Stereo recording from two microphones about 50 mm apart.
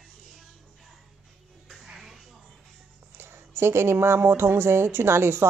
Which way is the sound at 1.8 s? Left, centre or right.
Centre.